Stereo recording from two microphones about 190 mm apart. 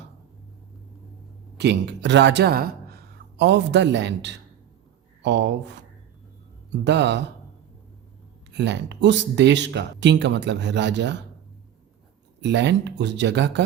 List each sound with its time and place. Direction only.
1.5 s speech: 65° right (ahead or behind)
8.5 s speech: 65° right (ahead or behind)
12.4 s speech: 65° right (ahead or behind)